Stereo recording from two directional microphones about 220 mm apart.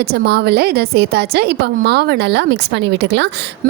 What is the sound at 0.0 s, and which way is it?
A woman's voice, 45° right (ahead or behind).